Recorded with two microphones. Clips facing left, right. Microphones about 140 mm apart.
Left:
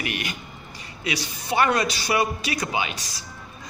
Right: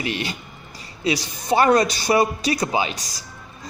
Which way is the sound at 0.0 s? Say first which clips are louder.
Right 4 dB; 30° right (ahead or behind).